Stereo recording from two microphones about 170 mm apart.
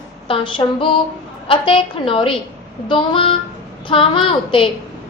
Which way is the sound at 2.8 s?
30° left (ahead or behind).